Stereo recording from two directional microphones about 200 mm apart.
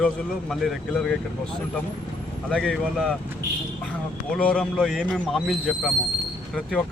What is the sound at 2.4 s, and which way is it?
Speech, 5° left (ahead or behind).